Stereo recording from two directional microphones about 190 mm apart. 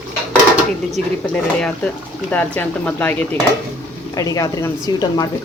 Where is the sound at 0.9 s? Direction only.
5° left (ahead or behind).